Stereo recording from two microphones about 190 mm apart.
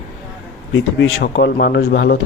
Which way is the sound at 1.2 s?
60° left (ahead or behind).